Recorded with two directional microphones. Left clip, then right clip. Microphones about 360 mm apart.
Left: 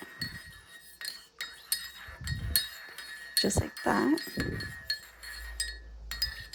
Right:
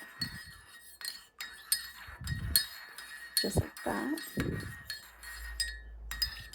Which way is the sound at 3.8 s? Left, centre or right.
Right.